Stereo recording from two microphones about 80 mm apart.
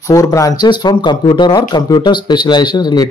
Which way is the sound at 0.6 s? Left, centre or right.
Left.